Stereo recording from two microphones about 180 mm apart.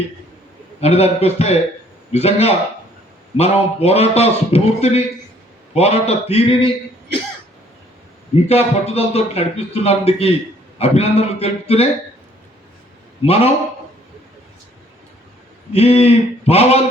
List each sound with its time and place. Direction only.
0.8 s speech: 35° left (ahead or behind)
8.4 s speech: 35° left (ahead or behind)
13.2 s speech: 35° left (ahead or behind)
15.7 s speech: 35° left (ahead or behind)